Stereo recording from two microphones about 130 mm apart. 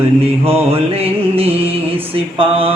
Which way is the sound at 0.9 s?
50° right (ahead or behind).